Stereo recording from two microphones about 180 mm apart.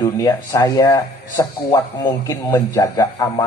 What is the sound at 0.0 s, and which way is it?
Speech, 20° left (ahead or behind).